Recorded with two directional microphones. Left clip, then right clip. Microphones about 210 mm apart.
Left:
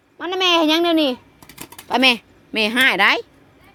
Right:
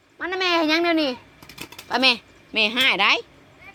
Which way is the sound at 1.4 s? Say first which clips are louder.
Even; 20° left (ahead or behind).